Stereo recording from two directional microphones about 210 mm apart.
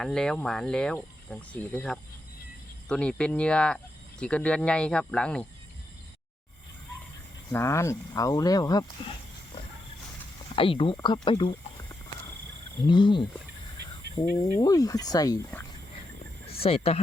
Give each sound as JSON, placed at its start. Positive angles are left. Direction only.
{"t": 0.0, "sound": "speech", "side_deg": 5}
{"t": 7.5, "sound": "speech", "side_deg": 15}
{"t": 10.5, "sound": "speech", "side_deg": 25}
{"t": 12.8, "sound": "speech", "side_deg": 20}
{"t": 14.6, "sound": "speech", "side_deg": 15}
{"t": 16.6, "sound": "speech", "side_deg": 25}